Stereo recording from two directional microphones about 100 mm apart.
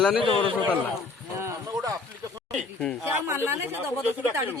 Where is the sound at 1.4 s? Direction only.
30° right (ahead or behind).